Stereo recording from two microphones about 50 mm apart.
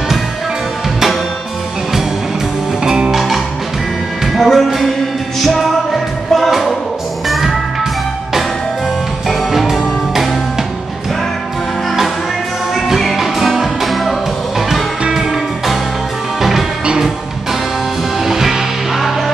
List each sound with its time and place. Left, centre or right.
2.8 s music: centre
4.4 s music: centre
9.3 s music: centre
12.7 s music: centre
15.1 s music: centre
16.8 s music: centre
18.2 s music: centre